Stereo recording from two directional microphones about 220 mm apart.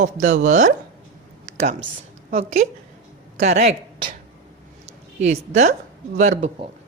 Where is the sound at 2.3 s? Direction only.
40° right (ahead or behind).